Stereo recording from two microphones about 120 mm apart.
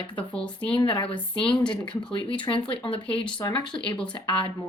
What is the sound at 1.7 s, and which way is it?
Speech, 45° left (ahead or behind).